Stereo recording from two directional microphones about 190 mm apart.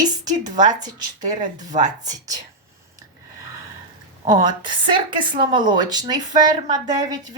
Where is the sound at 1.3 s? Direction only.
20° right (ahead or behind).